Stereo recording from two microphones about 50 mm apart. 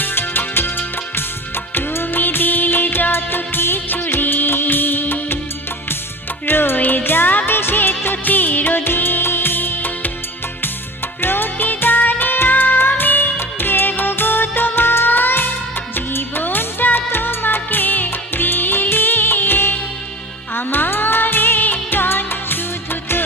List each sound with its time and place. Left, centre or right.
0.0 s music: left
6.4 s music: left
11.2 s music: left
16.0 s music of bollywood: left
20.6 s music: left